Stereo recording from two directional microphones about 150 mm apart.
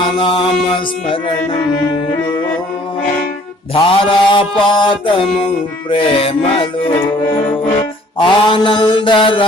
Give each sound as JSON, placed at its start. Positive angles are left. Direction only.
{"t": 0.0, "sound": "music", "side_deg": 35}
{"t": 3.8, "sound": "music", "side_deg": 35}
{"t": 8.2, "sound": "music", "side_deg": 30}